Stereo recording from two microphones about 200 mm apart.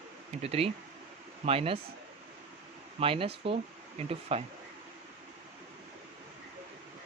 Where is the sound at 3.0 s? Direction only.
25° right (ahead or behind).